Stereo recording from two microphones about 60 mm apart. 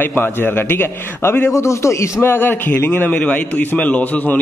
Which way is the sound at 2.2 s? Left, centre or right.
Left.